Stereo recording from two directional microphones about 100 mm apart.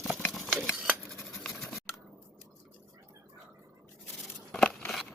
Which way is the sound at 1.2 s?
5° left (ahead or behind).